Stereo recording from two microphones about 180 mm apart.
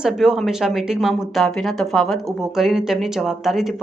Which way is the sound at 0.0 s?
5° right (ahead or behind).